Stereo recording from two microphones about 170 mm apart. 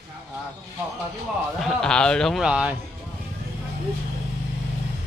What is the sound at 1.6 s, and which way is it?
Speech, 5° left (ahead or behind).